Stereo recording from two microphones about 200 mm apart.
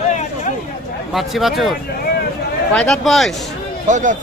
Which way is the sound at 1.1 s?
Centre (ahead or behind).